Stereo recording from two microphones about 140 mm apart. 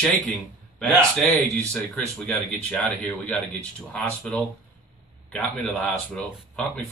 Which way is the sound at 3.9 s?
5° left (ahead or behind).